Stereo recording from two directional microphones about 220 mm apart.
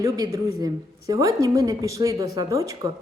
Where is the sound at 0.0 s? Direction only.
15° right (ahead or behind).